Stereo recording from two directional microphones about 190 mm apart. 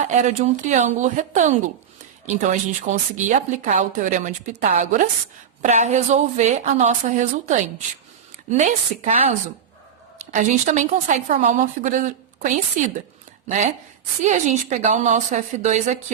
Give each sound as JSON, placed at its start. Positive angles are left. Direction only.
{"t": 0.0, "sound": "speech", "side_deg": -40}
{"t": 10.3, "sound": "speech", "side_deg": -40}